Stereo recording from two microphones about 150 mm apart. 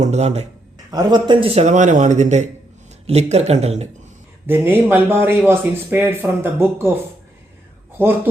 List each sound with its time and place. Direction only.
0.0 s a man's voice: 50° right (ahead or behind)
0.9 s a man's voice: 30° right (ahead or behind); by 3.8 s 45° right (ahead or behind)
4.4 s speech: 15° right (ahead or behind)
7.9 s speech: 15° right (ahead or behind)